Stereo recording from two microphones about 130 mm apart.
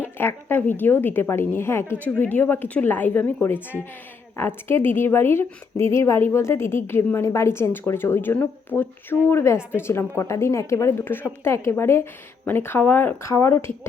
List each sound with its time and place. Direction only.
0.0 s a woman's voice: 15° left (ahead or behind)